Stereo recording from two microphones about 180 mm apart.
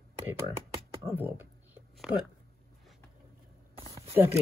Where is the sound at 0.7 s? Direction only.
30° right (ahead or behind).